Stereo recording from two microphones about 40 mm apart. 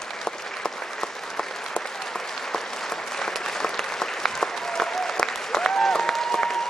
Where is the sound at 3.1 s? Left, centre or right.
Centre.